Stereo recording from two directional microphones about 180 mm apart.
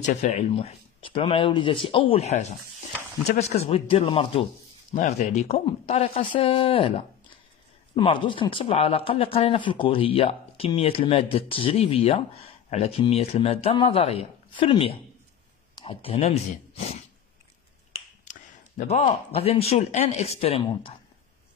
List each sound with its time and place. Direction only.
0.0 s speech: 40° left (ahead or behind)
18.2 s speech: 40° left (ahead or behind)